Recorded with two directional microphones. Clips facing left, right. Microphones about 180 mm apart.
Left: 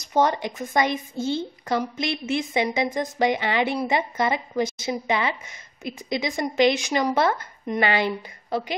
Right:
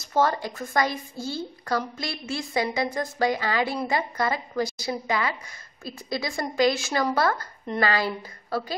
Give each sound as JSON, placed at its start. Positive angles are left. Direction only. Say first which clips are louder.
{"t": 0.0, "sound": "a woman's voice", "louder": "left 2 dB", "side_deg": 20}